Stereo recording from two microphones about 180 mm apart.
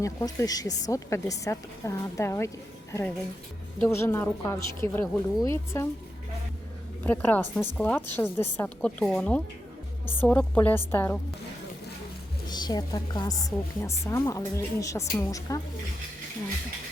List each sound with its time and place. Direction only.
0.0 s a woman's voice: 15° left (ahead or behind)
3.8 s a woman's voice: 15° left (ahead or behind)
7.0 s a woman's voice: 10° left (ahead or behind)
12.5 s a woman's voice: 25° left (ahead or behind)